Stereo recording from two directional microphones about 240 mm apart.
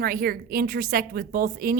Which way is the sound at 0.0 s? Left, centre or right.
Right.